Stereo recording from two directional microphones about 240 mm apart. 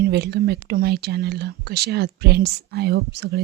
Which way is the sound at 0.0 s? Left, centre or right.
Right.